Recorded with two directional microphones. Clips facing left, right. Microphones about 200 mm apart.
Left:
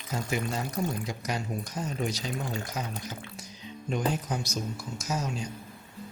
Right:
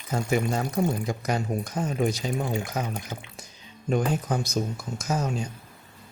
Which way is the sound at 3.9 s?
50° right (ahead or behind).